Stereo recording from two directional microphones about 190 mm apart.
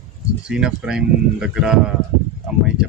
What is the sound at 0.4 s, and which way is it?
Speech, 5° right (ahead or behind).